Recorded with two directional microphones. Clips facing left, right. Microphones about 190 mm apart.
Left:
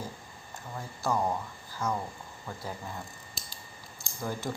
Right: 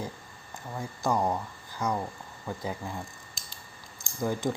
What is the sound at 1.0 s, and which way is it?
Speech, 15° right (ahead or behind).